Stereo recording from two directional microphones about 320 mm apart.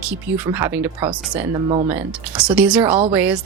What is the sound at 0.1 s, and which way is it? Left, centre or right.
A woman's voice, centre.